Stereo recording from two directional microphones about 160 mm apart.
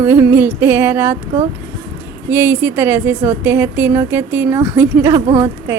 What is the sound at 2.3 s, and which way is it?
A woman's voice, 15° right (ahead or behind).